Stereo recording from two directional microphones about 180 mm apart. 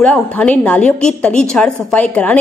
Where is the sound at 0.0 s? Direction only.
5° left (ahead or behind).